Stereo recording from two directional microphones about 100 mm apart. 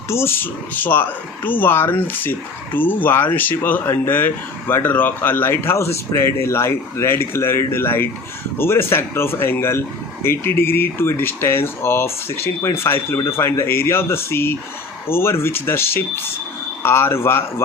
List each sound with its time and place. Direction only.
0.1 s speech: 25° left (ahead or behind)